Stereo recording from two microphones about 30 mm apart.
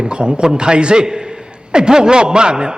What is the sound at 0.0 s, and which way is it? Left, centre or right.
A man's voice, right.